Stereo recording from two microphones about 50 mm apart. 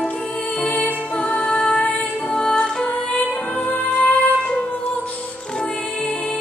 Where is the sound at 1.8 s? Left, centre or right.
Left.